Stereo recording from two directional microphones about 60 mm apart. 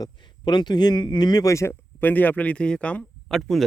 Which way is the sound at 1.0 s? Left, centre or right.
Left.